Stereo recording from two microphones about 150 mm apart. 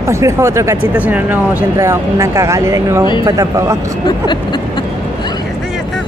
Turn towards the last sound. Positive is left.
turn(degrees=30)  # may be behind; listen again after turning